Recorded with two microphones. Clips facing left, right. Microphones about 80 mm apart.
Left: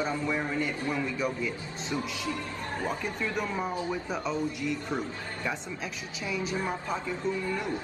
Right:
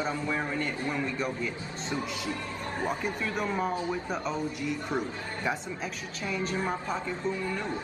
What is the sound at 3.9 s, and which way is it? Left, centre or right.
A man's voice, centre.